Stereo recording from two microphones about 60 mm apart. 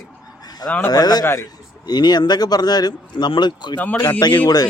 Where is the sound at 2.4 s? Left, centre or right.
Left.